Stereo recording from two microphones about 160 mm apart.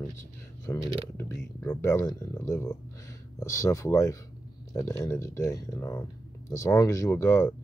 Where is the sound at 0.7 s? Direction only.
15° left (ahead or behind).